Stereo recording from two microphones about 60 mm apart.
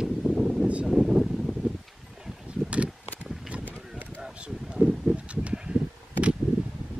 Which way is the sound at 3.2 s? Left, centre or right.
Centre.